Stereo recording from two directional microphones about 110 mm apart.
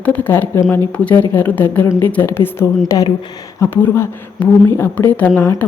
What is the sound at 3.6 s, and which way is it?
A woman's voice, 20° left (ahead or behind).